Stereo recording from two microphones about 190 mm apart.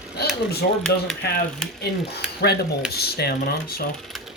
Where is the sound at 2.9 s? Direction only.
55° left (ahead or behind).